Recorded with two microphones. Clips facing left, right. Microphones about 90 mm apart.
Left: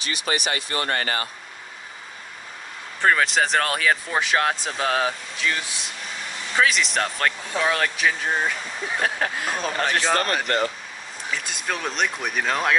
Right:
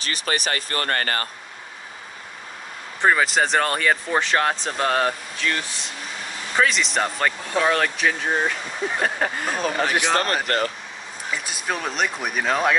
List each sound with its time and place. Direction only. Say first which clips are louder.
0.0 s speech: even; 40° right (ahead or behind)
3.0 s speech: right 1 dB; 5° right (ahead or behind)
9.9 s a man's voice: left 1 dB; 15° right (ahead or behind)
11.3 s speech: right 1 dB; 5° right (ahead or behind)